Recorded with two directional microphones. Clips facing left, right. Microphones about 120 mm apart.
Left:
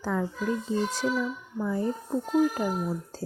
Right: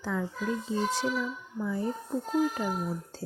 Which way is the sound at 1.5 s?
45° left (ahead or behind).